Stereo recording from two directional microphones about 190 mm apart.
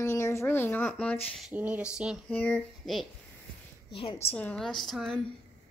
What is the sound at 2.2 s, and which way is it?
Speech, 10° left (ahead or behind).